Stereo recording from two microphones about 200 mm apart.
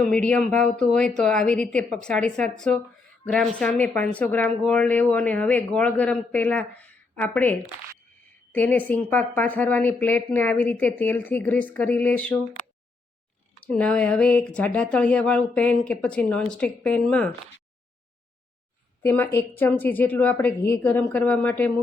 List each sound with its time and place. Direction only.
0.0 s speech: 5° left (ahead or behind)
13.7 s speech: 5° left (ahead or behind)
19.0 s speech: 10° left (ahead or behind)